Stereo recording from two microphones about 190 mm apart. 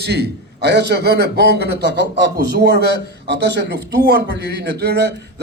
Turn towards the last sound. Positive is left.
turn(degrees=-60)  # may be behind; listen again after turning